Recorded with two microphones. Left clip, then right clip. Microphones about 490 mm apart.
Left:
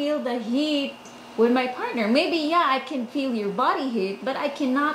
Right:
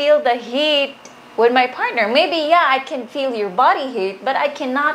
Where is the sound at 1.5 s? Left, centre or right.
Right.